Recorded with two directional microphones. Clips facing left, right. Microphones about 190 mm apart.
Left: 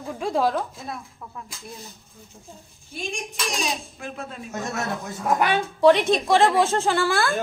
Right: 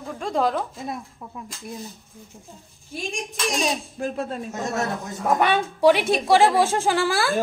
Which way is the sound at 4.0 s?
40° right (ahead or behind).